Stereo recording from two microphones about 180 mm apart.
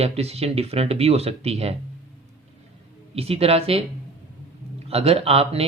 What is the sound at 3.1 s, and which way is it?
Speech, 35° right (ahead or behind).